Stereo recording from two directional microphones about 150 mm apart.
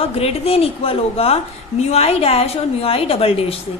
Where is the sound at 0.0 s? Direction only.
40° left (ahead or behind).